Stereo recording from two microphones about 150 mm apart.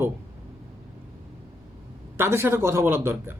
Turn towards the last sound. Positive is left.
turn(degrees=-15)  # may be behind; listen again after turning